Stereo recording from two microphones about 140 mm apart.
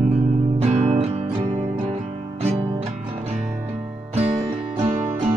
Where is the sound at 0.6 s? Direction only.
55° right (ahead or behind).